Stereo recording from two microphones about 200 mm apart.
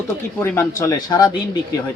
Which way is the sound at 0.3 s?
15° left (ahead or behind).